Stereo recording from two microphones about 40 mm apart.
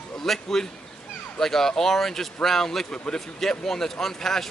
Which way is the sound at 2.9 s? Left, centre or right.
Left.